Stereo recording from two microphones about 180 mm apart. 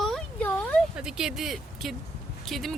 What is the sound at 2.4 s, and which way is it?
Speech, centre (ahead or behind).